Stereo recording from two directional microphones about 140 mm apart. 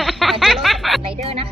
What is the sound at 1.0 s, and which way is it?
Speech, 45° right (ahead or behind).